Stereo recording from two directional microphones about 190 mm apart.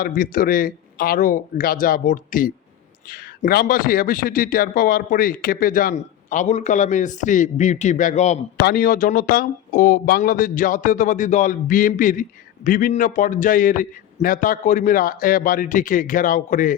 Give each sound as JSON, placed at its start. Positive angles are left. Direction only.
{"t": 0.0, "sound": "a man's voice", "side_deg": 45}
{"t": 8.6, "sound": "a man's voice", "side_deg": 50}